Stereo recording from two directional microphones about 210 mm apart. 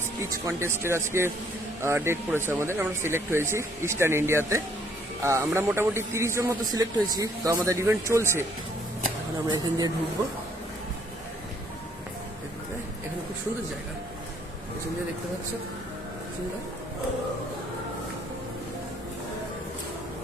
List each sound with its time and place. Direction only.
0.2 s a man's voice: 15° right (ahead or behind)
9.5 s a man's voice: 20° right (ahead or behind)